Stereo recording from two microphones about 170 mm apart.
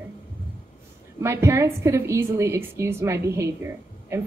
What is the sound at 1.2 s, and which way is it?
A woman's voice, 15° right (ahead or behind).